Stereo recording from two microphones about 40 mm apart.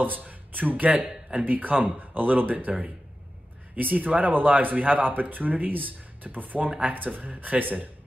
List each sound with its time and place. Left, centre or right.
0.0 s speech: right
0.8 s speech: right
1.4 s speech: right